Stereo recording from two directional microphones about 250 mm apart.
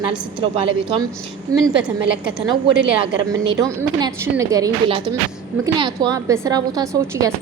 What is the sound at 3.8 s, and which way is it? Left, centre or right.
A woman's voice, centre.